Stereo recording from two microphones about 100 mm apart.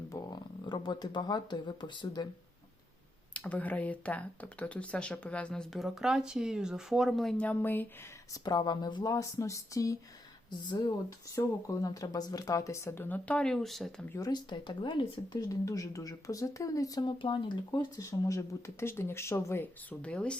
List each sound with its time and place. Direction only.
0.1 s speech: 40° left (ahead or behind)
3.3 s speech: 15° left (ahead or behind)
7.3 s speech: 15° left (ahead or behind)
8.3 s speech: 45° left (ahead or behind)
9.1 s speech: 30° left (ahead or behind)
11.3 s speech: 30° left (ahead or behind); by 13.9 s centre (ahead or behind)
14.2 s speech: 40° left (ahead or behind)
14.5 s speech: 55° left (ahead or behind)
15.4 s speech: 35° left (ahead or behind)
17.0 s speech: 55° left (ahead or behind); by 19.6 s 30° left (ahead or behind)
19.9 s speech: 10° left (ahead or behind)